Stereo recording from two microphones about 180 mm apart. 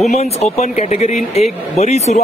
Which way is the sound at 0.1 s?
35° left (ahead or behind).